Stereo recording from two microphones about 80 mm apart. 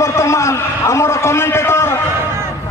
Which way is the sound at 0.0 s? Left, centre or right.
Left.